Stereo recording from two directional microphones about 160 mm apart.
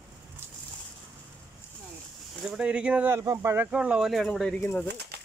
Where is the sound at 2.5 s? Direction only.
5° right (ahead or behind).